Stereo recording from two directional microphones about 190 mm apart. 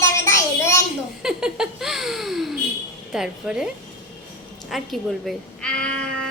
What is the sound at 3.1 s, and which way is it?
Speech, 5° right (ahead or behind).